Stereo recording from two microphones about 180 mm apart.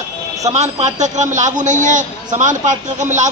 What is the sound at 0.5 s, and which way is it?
A man's voice, 40° right (ahead or behind).